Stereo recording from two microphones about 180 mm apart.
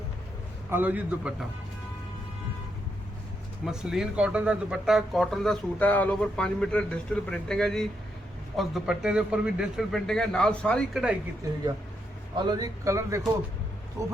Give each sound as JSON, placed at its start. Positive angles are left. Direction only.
{"t": 0.7, "sound": "speech", "side_deg": -10}
{"t": 3.7, "sound": "speech", "side_deg": -5}
{"t": 12.4, "sound": "speech", "side_deg": -25}